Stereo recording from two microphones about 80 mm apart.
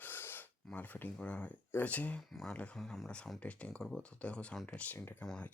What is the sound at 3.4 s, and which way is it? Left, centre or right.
Speech, centre.